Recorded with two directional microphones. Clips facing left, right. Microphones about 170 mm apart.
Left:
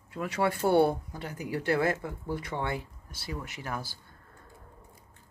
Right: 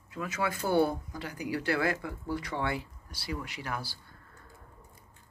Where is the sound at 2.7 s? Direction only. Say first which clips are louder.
Even; 50° left (ahead or behind).